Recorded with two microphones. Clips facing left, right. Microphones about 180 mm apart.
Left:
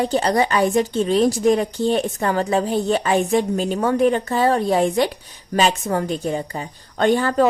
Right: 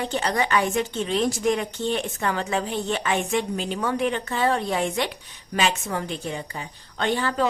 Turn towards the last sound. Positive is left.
turn(degrees=45)  # may be behind; listen again after turning